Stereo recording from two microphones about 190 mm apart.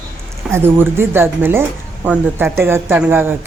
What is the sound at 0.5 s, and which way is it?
Speech, 10° right (ahead or behind).